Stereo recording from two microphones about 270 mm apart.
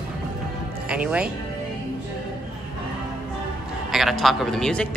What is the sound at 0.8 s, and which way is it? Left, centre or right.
Speech, centre.